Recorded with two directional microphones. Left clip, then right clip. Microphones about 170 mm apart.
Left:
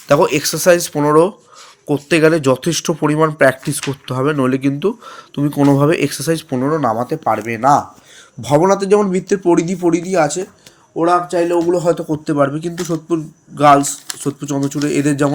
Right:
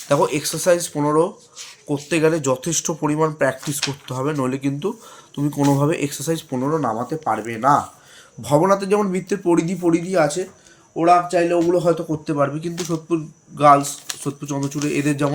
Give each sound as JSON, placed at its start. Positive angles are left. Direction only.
{"t": 0.1, "sound": "speech", "side_deg": 45}